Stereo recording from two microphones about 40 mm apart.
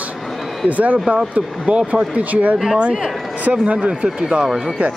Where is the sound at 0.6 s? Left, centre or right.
Right.